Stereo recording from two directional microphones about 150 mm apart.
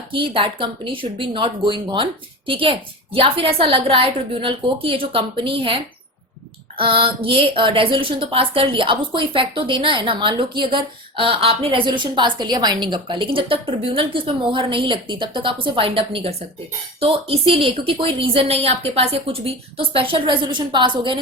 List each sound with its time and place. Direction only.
0.1 s speech: 35° right (ahead or behind)